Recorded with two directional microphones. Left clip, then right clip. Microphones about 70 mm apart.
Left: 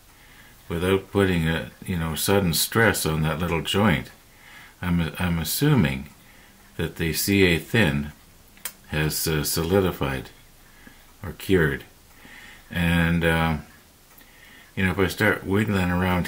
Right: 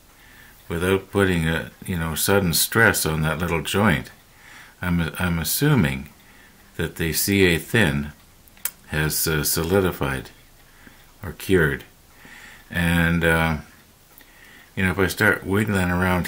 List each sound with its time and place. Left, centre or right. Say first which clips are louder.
0.7 s speech: right 1 dB; right
14.8 s speech: right 2 dB; right